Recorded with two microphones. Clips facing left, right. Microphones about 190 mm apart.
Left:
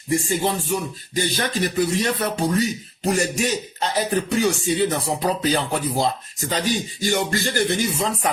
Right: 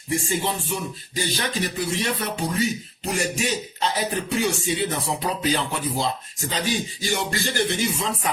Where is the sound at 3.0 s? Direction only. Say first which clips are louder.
Left 6 dB; 45° left (ahead or behind).